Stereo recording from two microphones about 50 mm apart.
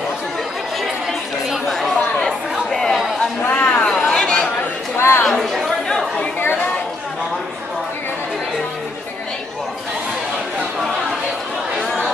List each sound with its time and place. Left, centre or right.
1.7 s chatter: centre
3.4 s a sound: left
4.1 s chatter: centre
4.9 s chatter: left
5.2 s chatter: centre
5.9 s chatter: centre